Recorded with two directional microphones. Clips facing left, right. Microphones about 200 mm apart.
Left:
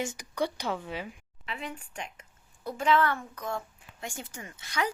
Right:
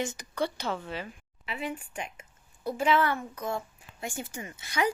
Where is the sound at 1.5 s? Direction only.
5° right (ahead or behind).